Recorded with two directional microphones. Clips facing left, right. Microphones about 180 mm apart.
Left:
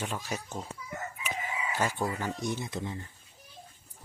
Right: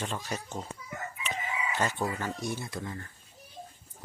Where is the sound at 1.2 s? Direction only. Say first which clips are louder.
Right 2 dB; 10° left (ahead or behind).